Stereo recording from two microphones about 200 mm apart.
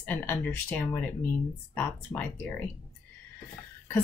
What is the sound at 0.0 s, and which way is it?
Speech, 10° left (ahead or behind).